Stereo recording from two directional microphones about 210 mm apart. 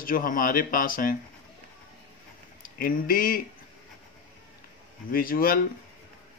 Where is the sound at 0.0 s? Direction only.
40° left (ahead or behind).